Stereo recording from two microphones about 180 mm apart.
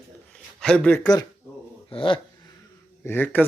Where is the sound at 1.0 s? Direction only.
20° left (ahead or behind).